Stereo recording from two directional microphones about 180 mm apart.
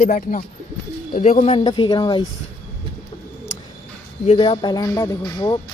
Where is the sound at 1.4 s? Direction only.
30° left (ahead or behind).